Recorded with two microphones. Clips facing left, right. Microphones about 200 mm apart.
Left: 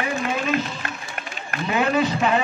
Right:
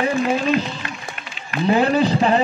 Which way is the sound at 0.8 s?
50° left (ahead or behind).